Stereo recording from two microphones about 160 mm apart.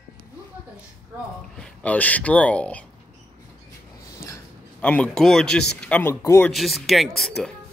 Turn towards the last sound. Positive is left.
turn(degrees=0)  # may be behind; listen again after turning